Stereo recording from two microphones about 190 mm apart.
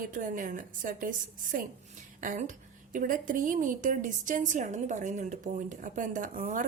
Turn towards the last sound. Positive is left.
turn(degrees=-45)  # may be behind; listen again after turning